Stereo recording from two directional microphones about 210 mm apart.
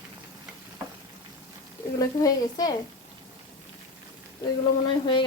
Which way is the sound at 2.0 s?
15° left (ahead or behind).